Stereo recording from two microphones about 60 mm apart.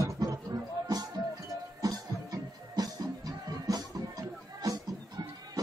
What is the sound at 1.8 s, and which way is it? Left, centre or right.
Music, right.